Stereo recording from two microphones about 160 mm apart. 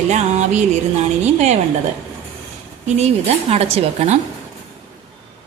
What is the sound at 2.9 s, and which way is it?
Speech, 45° right (ahead or behind).